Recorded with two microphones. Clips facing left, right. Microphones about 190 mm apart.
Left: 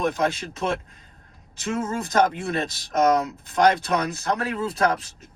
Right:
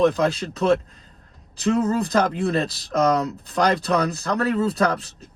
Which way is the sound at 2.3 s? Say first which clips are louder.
Right 5 dB; 35° right (ahead or behind).